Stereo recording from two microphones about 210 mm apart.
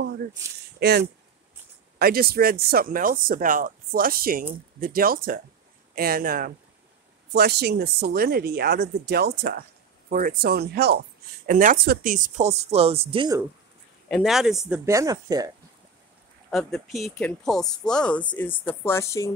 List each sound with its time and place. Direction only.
0.7 s speech: 50° right (ahead or behind); by 13.4 s 25° right (ahead or behind)
14.0 s speech: centre (ahead or behind)
14.9 s speech: 15° right (ahead or behind)
16.4 s speech: centre (ahead or behind)